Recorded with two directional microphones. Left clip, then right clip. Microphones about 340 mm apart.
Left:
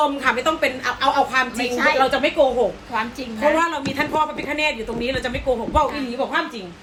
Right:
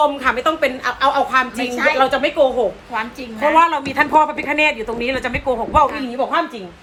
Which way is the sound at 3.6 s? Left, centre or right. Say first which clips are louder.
Right 6 dB; centre.